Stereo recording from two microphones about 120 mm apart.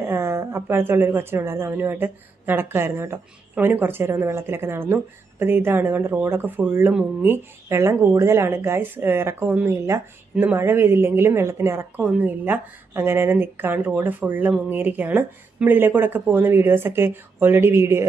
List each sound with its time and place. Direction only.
0.0 s speech: 20° right (ahead or behind)
12.0 s a woman's voice: 10° right (ahead or behind)